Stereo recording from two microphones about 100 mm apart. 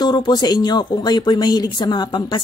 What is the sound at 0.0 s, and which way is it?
Speech, 45° left (ahead or behind).